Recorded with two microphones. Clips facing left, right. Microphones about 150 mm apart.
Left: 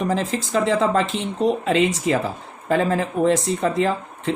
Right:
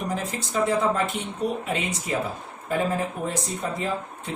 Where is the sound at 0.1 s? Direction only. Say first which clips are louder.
Left 7 dB; 90° left.